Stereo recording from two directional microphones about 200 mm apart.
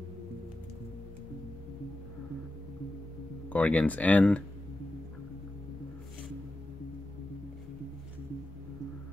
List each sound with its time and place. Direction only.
3.4 s speech: 5° left (ahead or behind)